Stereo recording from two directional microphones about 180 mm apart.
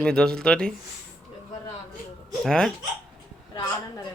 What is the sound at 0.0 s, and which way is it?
Speech, 5° left (ahead or behind).